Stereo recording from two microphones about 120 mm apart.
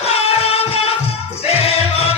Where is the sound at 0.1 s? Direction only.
55° left (ahead or behind).